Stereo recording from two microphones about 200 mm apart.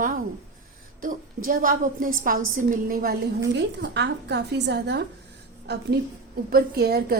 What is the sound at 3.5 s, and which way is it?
A woman's voice, 60° right (ahead or behind).